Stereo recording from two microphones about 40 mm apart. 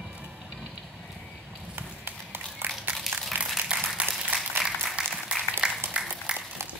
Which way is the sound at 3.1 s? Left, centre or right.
Right.